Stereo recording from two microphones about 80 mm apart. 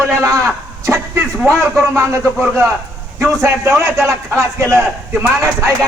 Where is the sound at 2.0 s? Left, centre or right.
Right.